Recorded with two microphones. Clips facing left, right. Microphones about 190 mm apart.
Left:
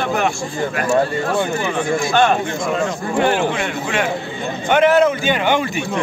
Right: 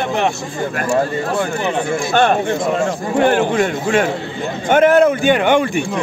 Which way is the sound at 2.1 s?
50° right (ahead or behind).